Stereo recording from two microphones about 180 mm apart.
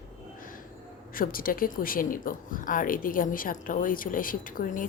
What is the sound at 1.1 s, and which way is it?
A woman's voice, 55° left (ahead or behind).